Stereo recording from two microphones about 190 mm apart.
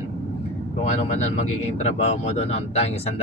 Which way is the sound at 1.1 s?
35° left (ahead or behind).